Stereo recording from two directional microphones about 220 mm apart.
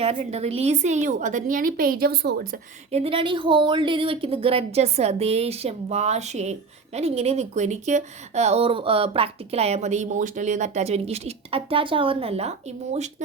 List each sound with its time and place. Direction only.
0.0 s a woman's voice: 30° right (ahead or behind); by 2.6 s 45° right (ahead or behind)
2.9 s speech: 25° right (ahead or behind)